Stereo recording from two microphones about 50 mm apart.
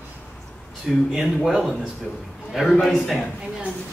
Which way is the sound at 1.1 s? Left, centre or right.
Centre.